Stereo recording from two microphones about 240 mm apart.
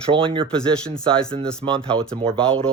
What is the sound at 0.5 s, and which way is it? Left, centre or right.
Speech, centre.